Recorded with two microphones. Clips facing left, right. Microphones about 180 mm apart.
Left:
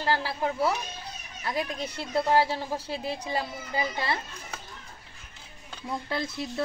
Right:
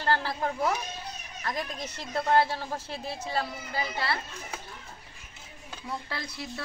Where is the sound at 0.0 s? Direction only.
10° left (ahead or behind).